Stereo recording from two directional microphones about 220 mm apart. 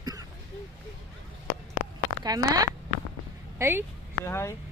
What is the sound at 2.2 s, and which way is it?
Speech, 15° right (ahead or behind).